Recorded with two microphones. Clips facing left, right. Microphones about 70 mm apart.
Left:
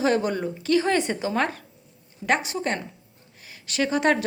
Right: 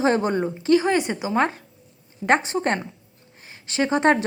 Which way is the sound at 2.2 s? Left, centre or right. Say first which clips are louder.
Right 4 dB; right.